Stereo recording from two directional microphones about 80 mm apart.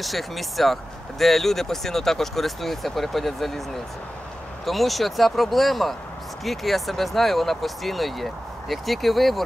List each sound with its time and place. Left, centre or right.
0.0 s speech: centre
4.6 s speech: centre